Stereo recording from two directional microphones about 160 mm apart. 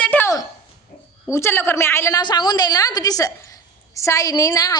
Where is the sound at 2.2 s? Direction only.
25° left (ahead or behind).